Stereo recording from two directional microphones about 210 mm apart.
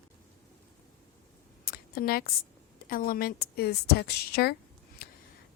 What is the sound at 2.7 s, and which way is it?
Speech, 45° left (ahead or behind).